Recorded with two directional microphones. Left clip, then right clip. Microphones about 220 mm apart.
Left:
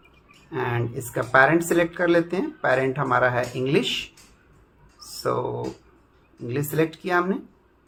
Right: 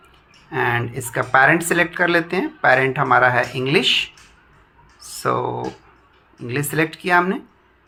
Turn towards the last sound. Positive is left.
turn(degrees=-20)  # may be behind; listen again after turning